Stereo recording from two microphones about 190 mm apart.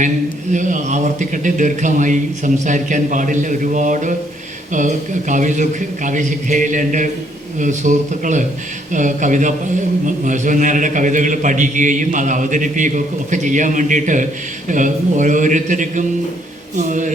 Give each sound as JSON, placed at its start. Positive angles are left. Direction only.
{"t": 0.5, "sound": "a man's voice", "side_deg": -40}